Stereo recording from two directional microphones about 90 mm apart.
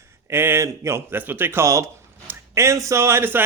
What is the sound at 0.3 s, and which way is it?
A man's voice, 25° right (ahead or behind).